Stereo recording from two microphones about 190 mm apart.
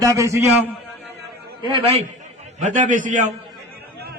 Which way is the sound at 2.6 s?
40° right (ahead or behind).